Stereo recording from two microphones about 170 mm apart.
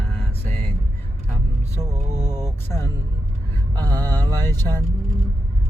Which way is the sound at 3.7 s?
25° right (ahead or behind).